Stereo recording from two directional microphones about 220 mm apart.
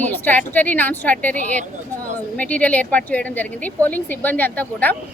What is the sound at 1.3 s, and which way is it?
Speech, 35° right (ahead or behind).